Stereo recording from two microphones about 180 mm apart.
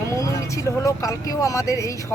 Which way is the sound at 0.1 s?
15° left (ahead or behind).